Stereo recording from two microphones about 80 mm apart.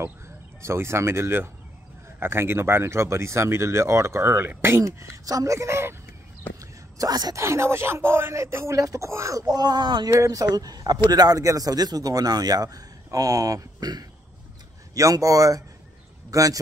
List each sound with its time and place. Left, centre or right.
0.6 s speech: right
6.6 s whispering: right
7.3 s speech: right
10.0 s a man's voice: right
15.0 s a man's voice: right